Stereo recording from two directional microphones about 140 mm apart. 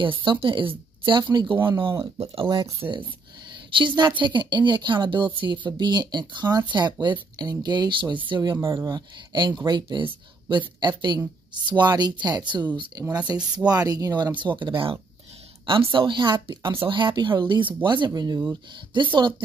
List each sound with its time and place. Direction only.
0.0 s a woman's voice: 35° right (ahead or behind)
2.8 s speech: 15° right (ahead or behind)
3.7 s a woman's voice: 35° right (ahead or behind)